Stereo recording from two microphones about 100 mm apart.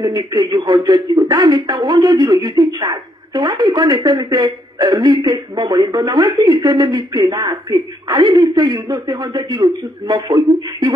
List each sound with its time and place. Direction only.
0.1 s a woman's voice: 40° right (ahead or behind)